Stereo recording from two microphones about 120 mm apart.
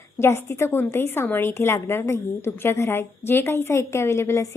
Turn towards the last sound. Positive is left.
turn(degrees=20)  # may be behind; listen again after turning